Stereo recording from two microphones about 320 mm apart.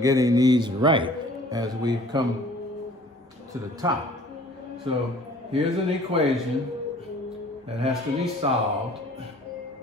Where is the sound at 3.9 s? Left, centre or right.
Centre.